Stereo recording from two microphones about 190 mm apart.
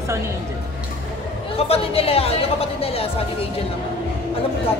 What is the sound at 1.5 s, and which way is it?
Speech, 30° left (ahead or behind).